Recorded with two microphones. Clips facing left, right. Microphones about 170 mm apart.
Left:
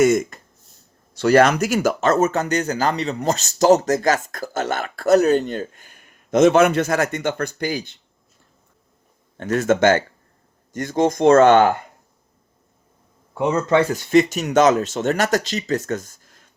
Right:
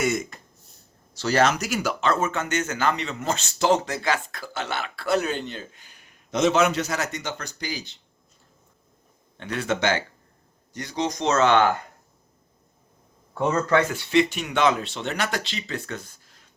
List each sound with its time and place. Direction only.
0.0 s a sound: 50° left (ahead or behind)
1.1 s speech: 55° left (ahead or behind)
9.4 s speech: 45° left (ahead or behind)
13.3 s speech: 15° left (ahead or behind)
13.9 s speech: 45° left (ahead or behind)